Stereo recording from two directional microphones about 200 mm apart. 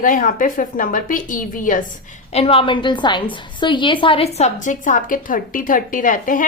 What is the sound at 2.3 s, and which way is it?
A woman's voice, 30° left (ahead or behind).